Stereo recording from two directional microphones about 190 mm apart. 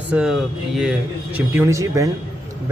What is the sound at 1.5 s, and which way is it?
Speech, 15° right (ahead or behind).